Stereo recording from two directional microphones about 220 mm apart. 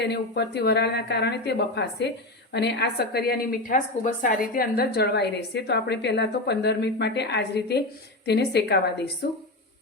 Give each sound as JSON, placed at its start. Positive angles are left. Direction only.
{"t": 0.0, "sound": "speech", "side_deg": 50}